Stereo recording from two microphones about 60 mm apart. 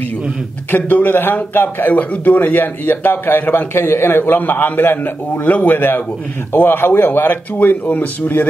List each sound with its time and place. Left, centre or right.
0.7 s a man's voice: left